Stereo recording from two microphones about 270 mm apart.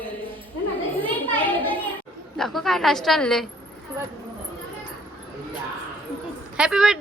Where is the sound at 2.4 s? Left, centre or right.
Centre.